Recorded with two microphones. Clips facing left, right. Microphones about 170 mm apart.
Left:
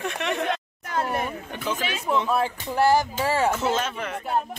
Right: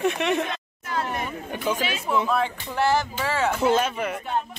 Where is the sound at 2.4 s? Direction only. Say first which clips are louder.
Left 3 dB; 40° left (ahead or behind).